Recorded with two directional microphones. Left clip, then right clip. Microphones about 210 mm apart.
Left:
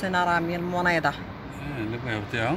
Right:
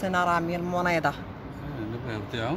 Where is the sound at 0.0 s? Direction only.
Centre (ahead or behind).